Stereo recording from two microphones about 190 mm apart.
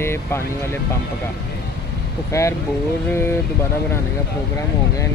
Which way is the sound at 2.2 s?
15° left (ahead or behind).